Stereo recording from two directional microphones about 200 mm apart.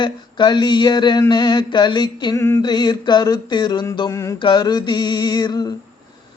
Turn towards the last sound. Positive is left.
turn(degrees=20)  # may be behind; listen again after turning